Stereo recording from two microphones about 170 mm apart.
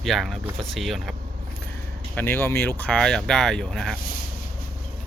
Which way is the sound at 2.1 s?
10° left (ahead or behind).